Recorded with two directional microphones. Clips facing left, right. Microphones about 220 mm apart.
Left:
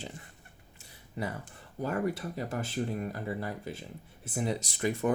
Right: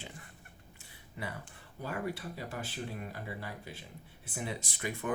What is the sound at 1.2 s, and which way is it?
Speech, 40° left (ahead or behind).